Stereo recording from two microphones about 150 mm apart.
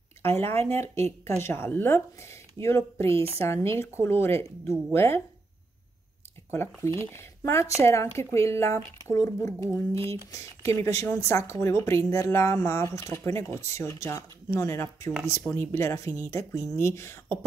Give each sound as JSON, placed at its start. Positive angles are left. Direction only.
{"t": 0.2, "sound": "speech", "side_deg": 15}
{"t": 6.5, "sound": "speech", "side_deg": 15}